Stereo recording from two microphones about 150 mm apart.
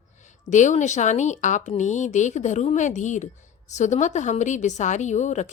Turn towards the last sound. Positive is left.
turn(degrees=50)  # may be behind; listen again after turning